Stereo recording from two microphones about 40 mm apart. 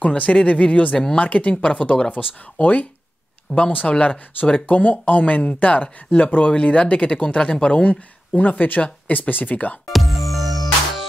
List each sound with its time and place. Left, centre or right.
0.0 s speech: left
2.2 s speech: centre
2.6 s speech: left
3.9 s speech: left
4.6 s speech: left
8.4 s speech: left
9.3 s speech: left
9.8 s music: centre